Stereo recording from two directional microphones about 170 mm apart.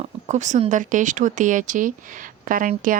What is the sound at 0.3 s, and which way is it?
A woman's voice, 45° right (ahead or behind).